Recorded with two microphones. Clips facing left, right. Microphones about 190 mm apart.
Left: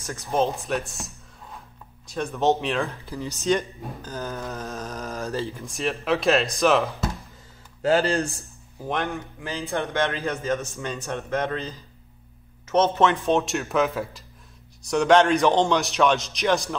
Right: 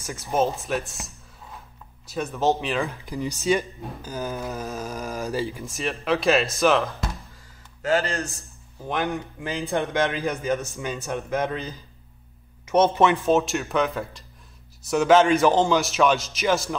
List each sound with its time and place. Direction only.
0.3 s a man's voice: centre (ahead or behind)
2.9 s speech: 15° right (ahead or behind)
5.7 s a man's voice: centre (ahead or behind)
7.8 s speech: 30° left (ahead or behind)
8.8 s a man's voice: centre (ahead or behind)
9.1 s speech: 15° right (ahead or behind)
13.2 s a man's voice: centre (ahead or behind)